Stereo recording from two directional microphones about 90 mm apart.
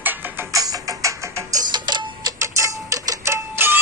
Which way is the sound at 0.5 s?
40° right (ahead or behind).